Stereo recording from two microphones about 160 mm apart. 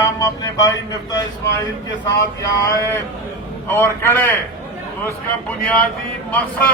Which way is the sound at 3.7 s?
15° left (ahead or behind).